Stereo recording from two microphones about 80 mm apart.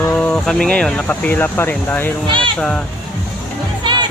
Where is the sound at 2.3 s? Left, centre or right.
Right.